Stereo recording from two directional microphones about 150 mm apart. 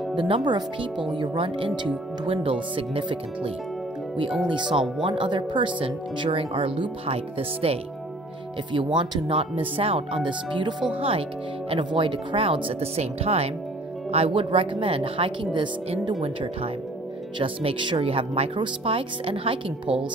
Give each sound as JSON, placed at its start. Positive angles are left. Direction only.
{"t": 0.1, "sound": "speech", "side_deg": -30}